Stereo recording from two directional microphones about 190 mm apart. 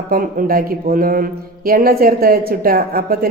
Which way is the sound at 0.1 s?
50° right (ahead or behind).